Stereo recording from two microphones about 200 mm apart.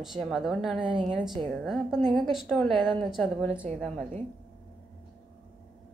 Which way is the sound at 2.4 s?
Centre (ahead or behind).